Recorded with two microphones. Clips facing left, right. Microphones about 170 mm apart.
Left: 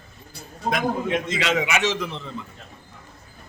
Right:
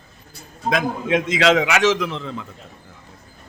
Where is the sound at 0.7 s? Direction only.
90° right.